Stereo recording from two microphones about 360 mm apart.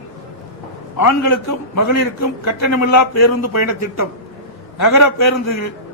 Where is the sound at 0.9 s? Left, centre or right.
Left.